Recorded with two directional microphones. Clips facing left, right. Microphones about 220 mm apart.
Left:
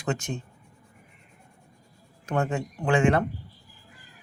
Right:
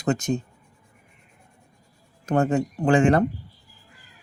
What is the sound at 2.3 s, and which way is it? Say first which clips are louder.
Speech: right 6 dB; 35° right (ahead or behind).